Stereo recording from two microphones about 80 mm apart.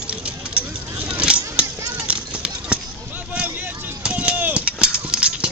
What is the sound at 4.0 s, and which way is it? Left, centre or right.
Run, centre.